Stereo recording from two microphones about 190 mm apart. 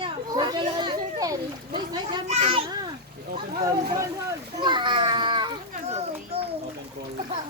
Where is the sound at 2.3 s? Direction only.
35° right (ahead or behind).